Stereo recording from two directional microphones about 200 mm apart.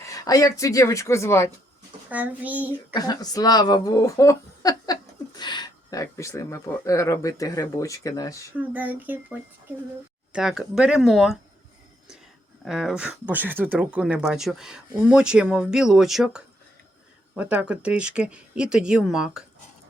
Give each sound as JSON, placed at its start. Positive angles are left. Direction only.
{"t": 0.0, "sound": "speech", "side_deg": 15}
{"t": 2.0, "sound": "speech", "side_deg": -5}
{"t": 2.9, "sound": "speech", "side_deg": 20}
{"t": 8.5, "sound": "speech", "side_deg": -10}
{"t": 10.3, "sound": "speech", "side_deg": -5}
{"t": 12.6, "sound": "speech", "side_deg": 0}